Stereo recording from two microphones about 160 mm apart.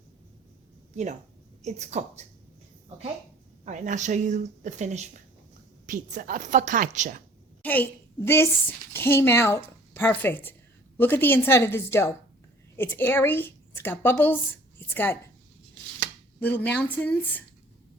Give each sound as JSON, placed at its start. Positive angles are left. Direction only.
{"t": 1.6, "sound": "a woman's voice", "side_deg": -45}
{"t": 3.7, "sound": "a woman's voice", "side_deg": -50}
{"t": 7.6, "sound": "a woman's voice", "side_deg": 10}
{"t": 16.4, "sound": "a woman's voice", "side_deg": 10}